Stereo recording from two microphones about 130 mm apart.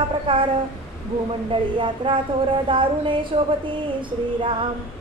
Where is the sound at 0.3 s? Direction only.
40° right (ahead or behind).